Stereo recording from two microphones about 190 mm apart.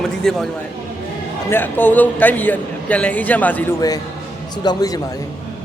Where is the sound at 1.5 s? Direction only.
10° left (ahead or behind).